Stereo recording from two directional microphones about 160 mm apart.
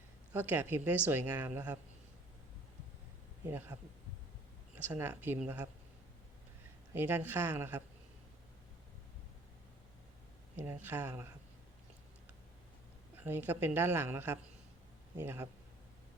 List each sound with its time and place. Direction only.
0.3 s a woman's voice: 15° right (ahead or behind)
3.4 s a woman's voice: 15° right (ahead or behind)
6.9 s a woman's voice: 15° right (ahead or behind)
10.6 s a woman's voice: 15° right (ahead or behind)
13.1 s a woman's voice: 15° right (ahead or behind)